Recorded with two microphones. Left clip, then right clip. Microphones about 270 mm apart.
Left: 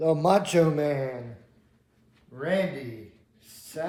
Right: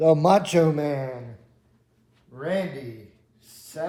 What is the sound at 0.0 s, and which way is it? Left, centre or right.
A man's voice, right.